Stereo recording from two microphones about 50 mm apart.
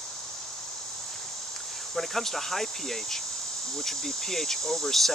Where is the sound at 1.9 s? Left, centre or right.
Centre.